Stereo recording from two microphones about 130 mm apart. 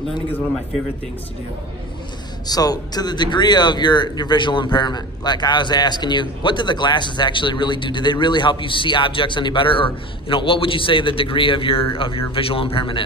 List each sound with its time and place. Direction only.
2.4 s a man's voice: 30° left (ahead or behind)